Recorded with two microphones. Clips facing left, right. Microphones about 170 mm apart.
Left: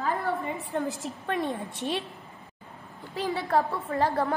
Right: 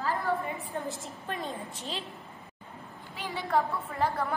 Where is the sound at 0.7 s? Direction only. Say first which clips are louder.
Left 5 dB; 70° left (ahead or behind).